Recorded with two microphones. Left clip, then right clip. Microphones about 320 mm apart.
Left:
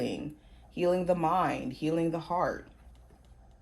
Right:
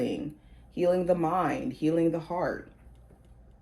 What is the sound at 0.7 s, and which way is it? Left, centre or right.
Speech, left.